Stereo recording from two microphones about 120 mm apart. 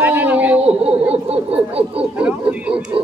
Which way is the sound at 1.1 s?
60° right (ahead or behind).